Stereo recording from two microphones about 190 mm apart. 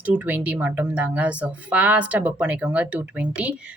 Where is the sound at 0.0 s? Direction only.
10° right (ahead or behind).